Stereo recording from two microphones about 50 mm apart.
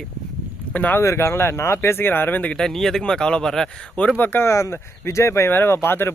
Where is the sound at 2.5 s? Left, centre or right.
Centre.